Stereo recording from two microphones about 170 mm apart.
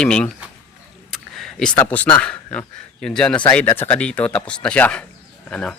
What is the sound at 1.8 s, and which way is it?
A man's voice, 10° left (ahead or behind).